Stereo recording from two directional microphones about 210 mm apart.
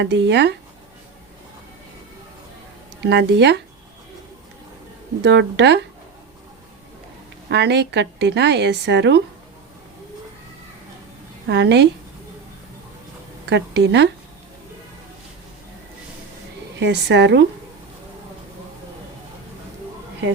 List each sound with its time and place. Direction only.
0.0 s a woman's voice: 55° right (ahead or behind)
3.0 s speech: 55° right (ahead or behind)
5.2 s a woman's voice: 55° right (ahead or behind)
7.4 s a woman's voice: 55° right (ahead or behind)
11.4 s a woman's voice: 55° right (ahead or behind)
13.4 s speech: 55° right (ahead or behind)
16.7 s a woman's voice: 55° right (ahead or behind)